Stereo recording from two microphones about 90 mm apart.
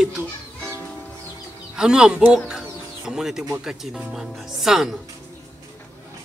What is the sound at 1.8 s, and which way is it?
Speech, 10° right (ahead or behind).